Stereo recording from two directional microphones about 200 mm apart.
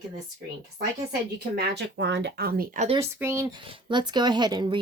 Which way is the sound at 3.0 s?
10° right (ahead or behind).